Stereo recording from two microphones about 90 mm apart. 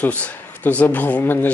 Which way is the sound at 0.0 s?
15° left (ahead or behind).